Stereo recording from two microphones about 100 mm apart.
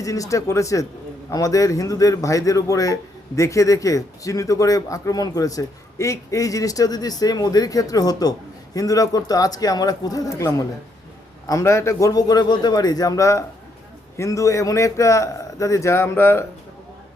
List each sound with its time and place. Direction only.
0.0 s a man's voice: 35° left (ahead or behind)